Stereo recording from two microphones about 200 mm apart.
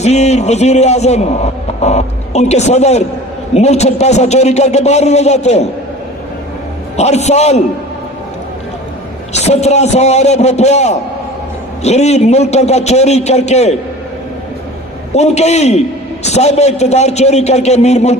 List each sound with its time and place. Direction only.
0.0 s a man's voice: 35° left (ahead or behind)
6.9 s a man's voice: 35° left (ahead or behind)
9.3 s a man's voice: 35° left (ahead or behind)
15.1 s a man's voice: 35° left (ahead or behind)